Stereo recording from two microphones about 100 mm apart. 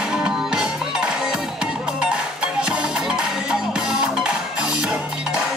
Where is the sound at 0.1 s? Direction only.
5° right (ahead or behind).